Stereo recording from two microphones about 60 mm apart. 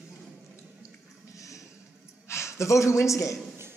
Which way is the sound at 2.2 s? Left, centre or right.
Left.